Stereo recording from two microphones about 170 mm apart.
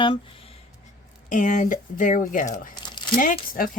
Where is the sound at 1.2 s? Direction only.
50° left (ahead or behind).